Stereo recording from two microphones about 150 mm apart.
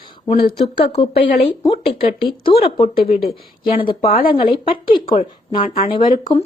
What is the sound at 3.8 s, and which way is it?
Speech, 35° left (ahead or behind).